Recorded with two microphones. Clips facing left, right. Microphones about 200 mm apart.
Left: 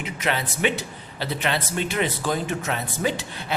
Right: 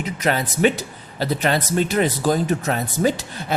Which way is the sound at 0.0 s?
40° right (ahead or behind).